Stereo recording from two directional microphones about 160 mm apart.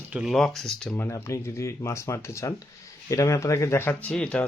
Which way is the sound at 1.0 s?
15° left (ahead or behind).